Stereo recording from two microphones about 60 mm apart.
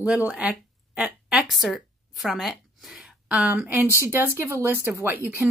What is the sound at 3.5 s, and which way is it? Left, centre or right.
Speech, right.